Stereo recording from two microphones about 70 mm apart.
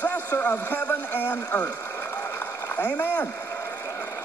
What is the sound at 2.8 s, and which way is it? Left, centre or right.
Speech, left.